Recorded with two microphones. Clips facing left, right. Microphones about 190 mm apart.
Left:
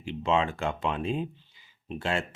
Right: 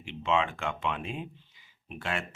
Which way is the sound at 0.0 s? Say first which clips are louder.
Left 2 dB; 35° left (ahead or behind).